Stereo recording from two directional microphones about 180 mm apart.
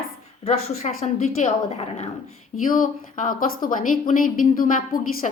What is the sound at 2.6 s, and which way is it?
A woman's voice, 50° left (ahead or behind).